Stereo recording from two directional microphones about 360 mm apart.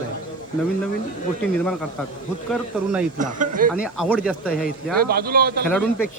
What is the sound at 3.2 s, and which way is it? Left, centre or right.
Speech, right.